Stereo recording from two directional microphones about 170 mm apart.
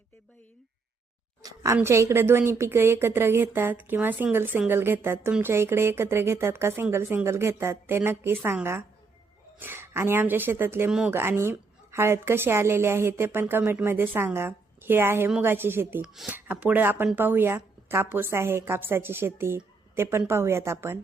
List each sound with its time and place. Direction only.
1.4 s speech: 20° right (ahead or behind)